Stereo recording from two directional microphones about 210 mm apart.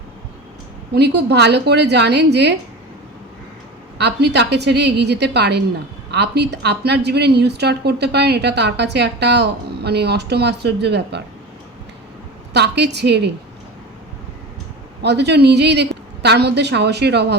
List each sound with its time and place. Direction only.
0.9 s a woman's voice: 50° right (ahead or behind)
3.9 s a woman's voice: 55° right (ahead or behind)
12.5 s a woman's voice: 55° right (ahead or behind)
15.0 s a woman's voice: 55° right (ahead or behind)